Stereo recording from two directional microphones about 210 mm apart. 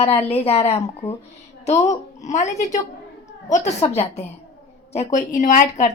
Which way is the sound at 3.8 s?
30° left (ahead or behind).